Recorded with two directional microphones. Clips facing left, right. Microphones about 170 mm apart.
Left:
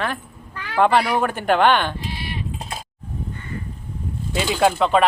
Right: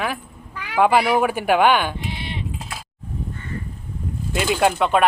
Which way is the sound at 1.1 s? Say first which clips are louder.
Right 1 dB; 10° right (ahead or behind).